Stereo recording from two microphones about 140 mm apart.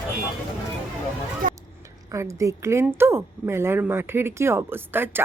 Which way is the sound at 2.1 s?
20° right (ahead or behind).